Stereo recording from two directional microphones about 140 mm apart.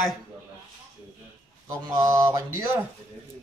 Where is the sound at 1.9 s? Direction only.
20° right (ahead or behind).